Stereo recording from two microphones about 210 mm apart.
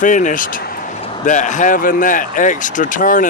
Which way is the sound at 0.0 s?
40° left (ahead or behind).